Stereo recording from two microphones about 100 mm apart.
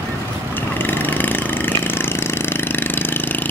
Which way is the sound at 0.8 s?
20° left (ahead or behind).